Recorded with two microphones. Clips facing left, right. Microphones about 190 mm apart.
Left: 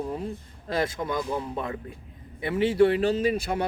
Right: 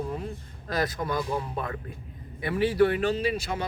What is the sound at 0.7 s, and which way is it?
Speech, 25° left (ahead or behind).